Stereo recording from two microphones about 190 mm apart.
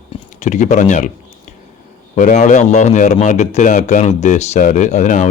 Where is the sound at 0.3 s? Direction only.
40° left (ahead or behind).